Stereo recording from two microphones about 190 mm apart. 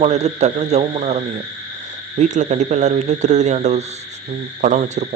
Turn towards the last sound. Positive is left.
turn(degrees=-35)  # may be behind; listen again after turning